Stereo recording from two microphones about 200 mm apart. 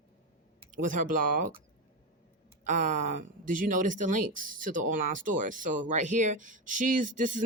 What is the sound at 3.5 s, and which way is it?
Speech, 40° right (ahead or behind).